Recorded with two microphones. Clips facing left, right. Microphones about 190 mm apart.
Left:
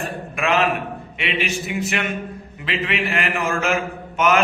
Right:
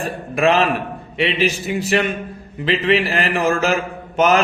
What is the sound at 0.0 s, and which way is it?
A man's voice, 35° right (ahead or behind).